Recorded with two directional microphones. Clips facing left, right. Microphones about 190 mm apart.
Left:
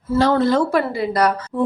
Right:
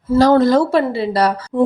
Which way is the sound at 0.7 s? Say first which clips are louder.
Right 3 dB; 30° right (ahead or behind).